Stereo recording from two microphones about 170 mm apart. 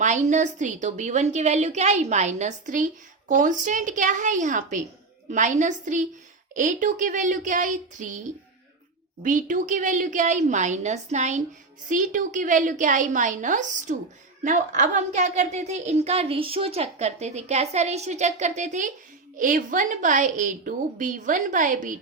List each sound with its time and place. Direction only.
0.0 s a woman's voice: 45° right (ahead or behind)
9.2 s a woman's voice: 50° right (ahead or behind)